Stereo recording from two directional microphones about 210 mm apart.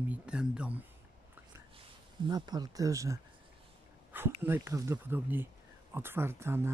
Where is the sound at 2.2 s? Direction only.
20° right (ahead or behind).